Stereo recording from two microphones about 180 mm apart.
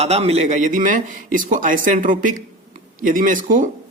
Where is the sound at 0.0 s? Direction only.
35° right (ahead or behind).